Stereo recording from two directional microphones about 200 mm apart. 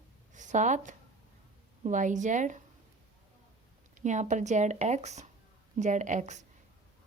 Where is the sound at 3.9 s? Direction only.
35° right (ahead or behind).